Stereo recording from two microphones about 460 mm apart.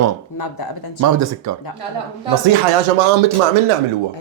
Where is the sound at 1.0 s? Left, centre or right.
Right.